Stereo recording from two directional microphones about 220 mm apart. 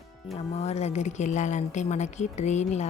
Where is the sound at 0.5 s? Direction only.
30° left (ahead or behind).